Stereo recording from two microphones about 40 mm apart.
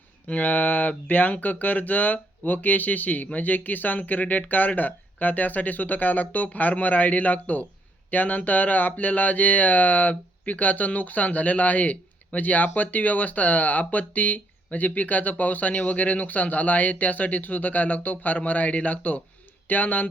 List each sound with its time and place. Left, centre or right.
0.3 s speech: left